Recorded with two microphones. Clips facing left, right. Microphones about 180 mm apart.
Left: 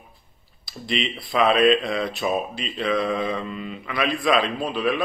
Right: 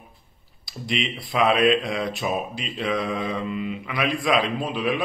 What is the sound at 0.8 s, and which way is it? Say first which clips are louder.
Speech: left 1 dB; 10° right (ahead or behind).